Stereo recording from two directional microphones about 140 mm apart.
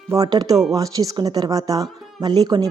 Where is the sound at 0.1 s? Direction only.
25° right (ahead or behind).